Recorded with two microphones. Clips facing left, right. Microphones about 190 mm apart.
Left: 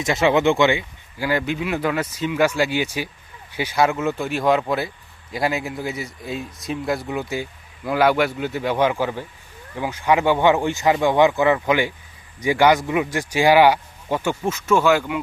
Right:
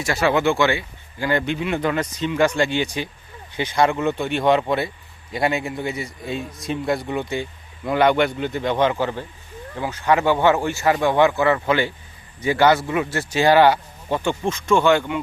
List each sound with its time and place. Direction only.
0.0 s speech: 20° left (ahead or behind)
1.3 s speech: 5° left (ahead or behind)